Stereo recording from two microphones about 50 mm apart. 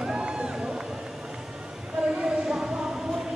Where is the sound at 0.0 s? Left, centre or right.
Centre.